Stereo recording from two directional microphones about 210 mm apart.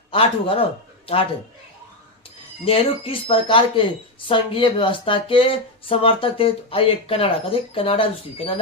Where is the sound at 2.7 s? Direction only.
25° left (ahead or behind).